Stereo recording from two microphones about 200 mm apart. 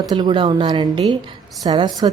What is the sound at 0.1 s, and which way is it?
Speech, 25° right (ahead or behind).